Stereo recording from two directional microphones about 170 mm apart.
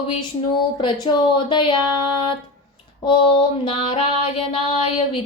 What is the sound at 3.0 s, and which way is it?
Female singing, 30° left (ahead or behind).